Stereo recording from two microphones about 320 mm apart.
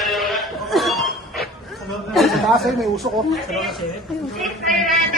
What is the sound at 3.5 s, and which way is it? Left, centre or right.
Speech, centre.